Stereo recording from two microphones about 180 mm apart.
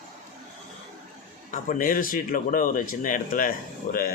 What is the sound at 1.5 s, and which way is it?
Speech, 50° left (ahead or behind).